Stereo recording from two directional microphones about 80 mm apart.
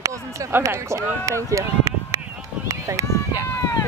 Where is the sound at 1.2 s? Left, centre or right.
Right.